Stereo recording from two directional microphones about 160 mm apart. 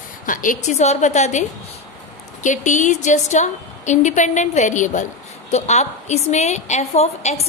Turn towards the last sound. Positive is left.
turn(degrees=45)  # may be behind; listen again after turning